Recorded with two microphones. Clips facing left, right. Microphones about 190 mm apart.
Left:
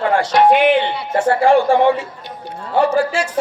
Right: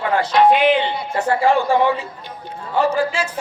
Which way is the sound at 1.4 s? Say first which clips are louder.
Left 4 dB; 50° left (ahead or behind).